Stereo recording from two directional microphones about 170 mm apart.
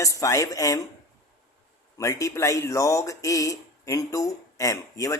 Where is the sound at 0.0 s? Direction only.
20° left (ahead or behind).